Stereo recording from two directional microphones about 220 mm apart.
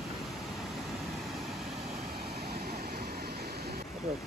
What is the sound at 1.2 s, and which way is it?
Vehicle, centre (ahead or behind).